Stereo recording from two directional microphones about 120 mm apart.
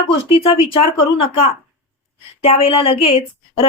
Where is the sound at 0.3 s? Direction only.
50° left (ahead or behind).